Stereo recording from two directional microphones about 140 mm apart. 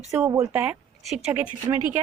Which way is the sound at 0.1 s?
20° right (ahead or behind).